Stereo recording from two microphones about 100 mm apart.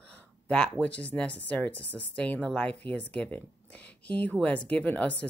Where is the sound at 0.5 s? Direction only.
15° left (ahead or behind).